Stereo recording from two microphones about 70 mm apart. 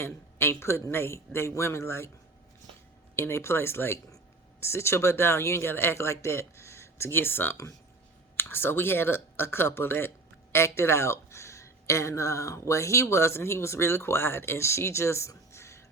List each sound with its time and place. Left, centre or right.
0.0 s speech: left
3.2 s speech: left